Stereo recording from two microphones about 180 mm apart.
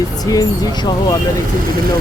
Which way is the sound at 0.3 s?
20° left (ahead or behind).